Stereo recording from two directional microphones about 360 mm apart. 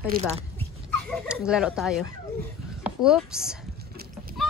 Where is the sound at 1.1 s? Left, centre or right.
Centre.